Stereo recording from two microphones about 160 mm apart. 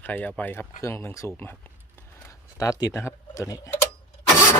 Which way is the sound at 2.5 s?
20° left (ahead or behind).